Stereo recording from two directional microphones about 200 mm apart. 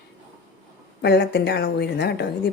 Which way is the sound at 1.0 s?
55° left (ahead or behind).